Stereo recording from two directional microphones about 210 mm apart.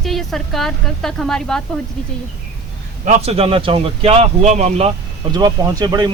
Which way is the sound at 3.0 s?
30° right (ahead or behind).